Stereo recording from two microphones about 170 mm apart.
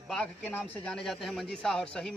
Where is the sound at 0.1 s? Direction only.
5° left (ahead or behind).